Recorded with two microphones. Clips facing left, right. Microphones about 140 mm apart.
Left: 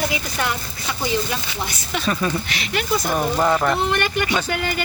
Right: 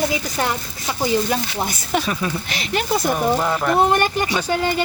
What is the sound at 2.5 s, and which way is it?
Speech, 45° right (ahead or behind).